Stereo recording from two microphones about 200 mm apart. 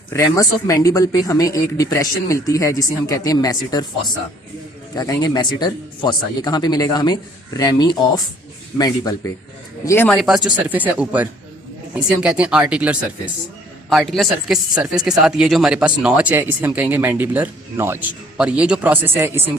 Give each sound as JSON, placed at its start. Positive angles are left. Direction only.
{"t": 0.1, "sound": "speech", "side_deg": 15}
{"t": 4.9, "sound": "speech", "side_deg": 20}
{"t": 10.2, "sound": "speech", "side_deg": 0}